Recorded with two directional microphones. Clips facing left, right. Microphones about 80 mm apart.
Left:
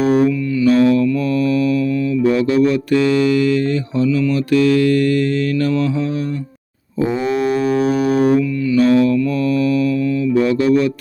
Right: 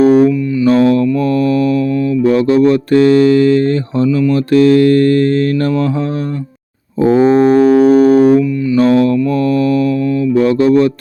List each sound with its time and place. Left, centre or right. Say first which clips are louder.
0.0 s music: right 6 dB; right
0.7 s mantra: right 3 dB; right
7.2 s music: right 11 dB; right
9.3 s mantra: right 4 dB; right